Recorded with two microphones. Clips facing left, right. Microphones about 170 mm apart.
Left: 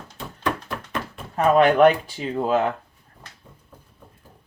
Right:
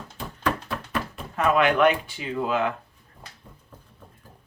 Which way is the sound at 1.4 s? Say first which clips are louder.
Left 5 dB; 40° left (ahead or behind).